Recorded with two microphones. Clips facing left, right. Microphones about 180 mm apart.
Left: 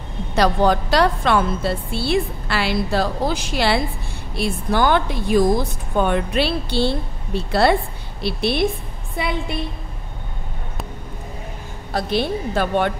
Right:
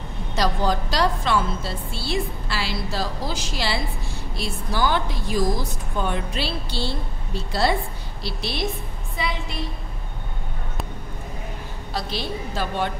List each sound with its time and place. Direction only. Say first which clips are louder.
0.4 s a woman's voice: left 6 dB; 60° left (ahead or behind)
11.9 s a woman's voice: left 8 dB; 55° left (ahead or behind)